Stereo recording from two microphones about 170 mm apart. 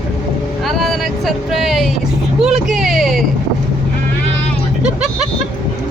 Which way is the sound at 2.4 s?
5° right (ahead or behind).